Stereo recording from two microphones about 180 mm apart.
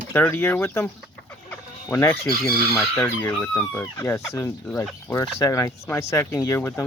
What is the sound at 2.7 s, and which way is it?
Speech, 10° left (ahead or behind).